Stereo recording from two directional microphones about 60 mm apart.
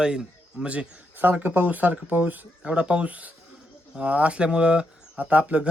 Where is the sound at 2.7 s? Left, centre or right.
Centre.